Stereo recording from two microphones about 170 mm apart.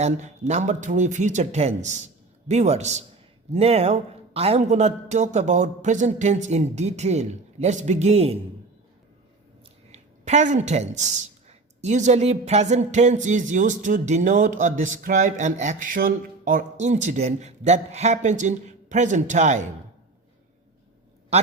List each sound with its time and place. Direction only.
0.0 s a man's voice: 40° right (ahead or behind)
9.9 s speech: 40° right (ahead or behind)